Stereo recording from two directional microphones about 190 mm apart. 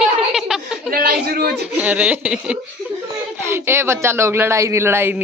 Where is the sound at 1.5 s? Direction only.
5° right (ahead or behind).